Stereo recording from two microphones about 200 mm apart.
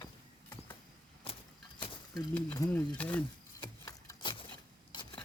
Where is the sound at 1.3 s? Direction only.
25° left (ahead or behind).